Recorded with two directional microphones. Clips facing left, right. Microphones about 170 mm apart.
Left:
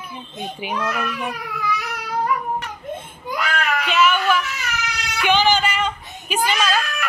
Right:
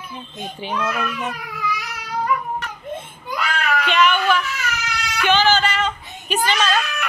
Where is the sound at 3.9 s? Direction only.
5° left (ahead or behind).